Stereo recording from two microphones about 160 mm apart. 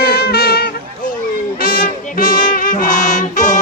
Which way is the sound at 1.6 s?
65° left (ahead or behind).